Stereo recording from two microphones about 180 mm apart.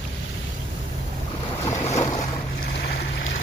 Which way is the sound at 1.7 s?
40° left (ahead or behind).